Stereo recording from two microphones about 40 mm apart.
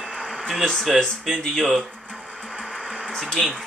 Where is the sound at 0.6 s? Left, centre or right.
Centre.